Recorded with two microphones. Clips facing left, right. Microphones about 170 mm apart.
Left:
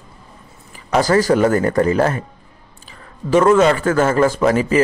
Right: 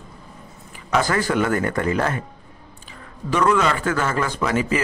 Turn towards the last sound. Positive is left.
turn(degrees=40)  # may be behind; listen again after turning